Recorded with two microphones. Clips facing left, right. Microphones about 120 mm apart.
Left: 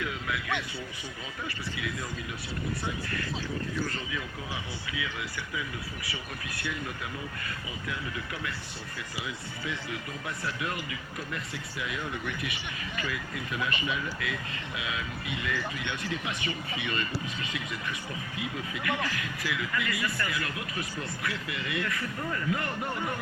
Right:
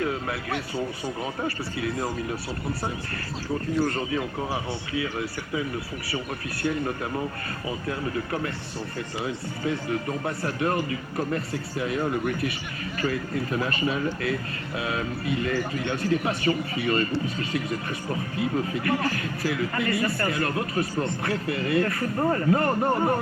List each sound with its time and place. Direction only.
0.0 s speech: 40° right (ahead or behind)
3.8 s speech: 40° right (ahead or behind)